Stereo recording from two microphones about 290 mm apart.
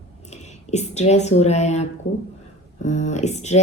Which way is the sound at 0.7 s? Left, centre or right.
Left.